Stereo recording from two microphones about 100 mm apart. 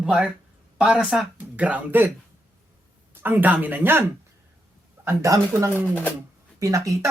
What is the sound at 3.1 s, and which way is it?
A woman's voice, 20° right (ahead or behind).